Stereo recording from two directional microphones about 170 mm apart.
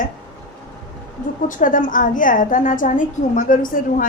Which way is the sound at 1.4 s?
50° left (ahead or behind).